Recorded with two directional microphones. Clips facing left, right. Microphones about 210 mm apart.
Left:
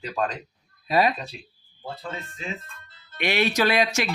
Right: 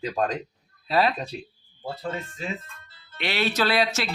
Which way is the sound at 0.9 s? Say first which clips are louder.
Left 1 dB; 15° left (ahead or behind).